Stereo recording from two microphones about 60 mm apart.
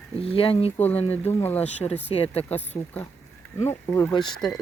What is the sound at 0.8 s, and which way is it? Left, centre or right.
Speech, left.